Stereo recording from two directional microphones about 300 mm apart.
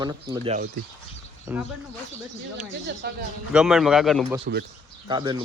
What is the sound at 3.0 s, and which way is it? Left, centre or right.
Speech, right.